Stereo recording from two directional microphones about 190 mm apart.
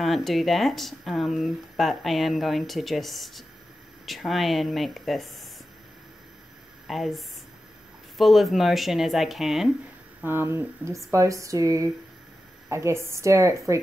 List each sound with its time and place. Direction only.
0.0 s speech: centre (ahead or behind)
6.9 s speech: centre (ahead or behind)
10.2 s a woman's voice: 10° right (ahead or behind)